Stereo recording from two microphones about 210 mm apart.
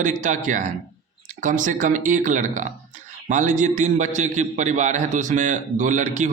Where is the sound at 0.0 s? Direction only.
35° right (ahead or behind).